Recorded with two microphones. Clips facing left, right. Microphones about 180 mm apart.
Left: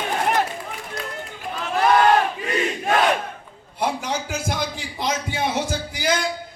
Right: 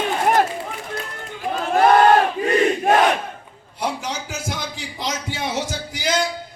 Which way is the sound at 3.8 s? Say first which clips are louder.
Left 2 dB; 55° left (ahead or behind).